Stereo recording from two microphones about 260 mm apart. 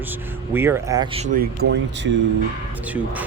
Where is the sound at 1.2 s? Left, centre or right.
Right.